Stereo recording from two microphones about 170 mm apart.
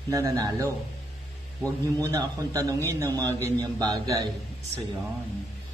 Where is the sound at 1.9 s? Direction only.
20° right (ahead or behind).